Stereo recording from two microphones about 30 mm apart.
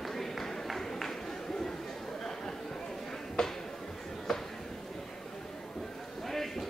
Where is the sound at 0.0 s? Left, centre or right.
Centre.